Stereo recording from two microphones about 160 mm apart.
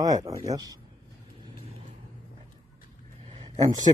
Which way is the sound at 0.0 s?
20° right (ahead or behind).